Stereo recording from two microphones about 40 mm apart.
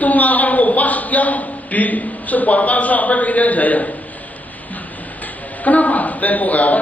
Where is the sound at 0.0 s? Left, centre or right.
Left.